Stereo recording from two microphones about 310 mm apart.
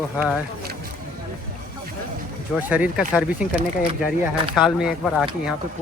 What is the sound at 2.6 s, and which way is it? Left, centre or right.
Speech, centre.